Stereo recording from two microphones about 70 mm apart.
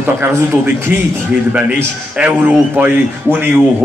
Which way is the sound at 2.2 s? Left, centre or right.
Centre.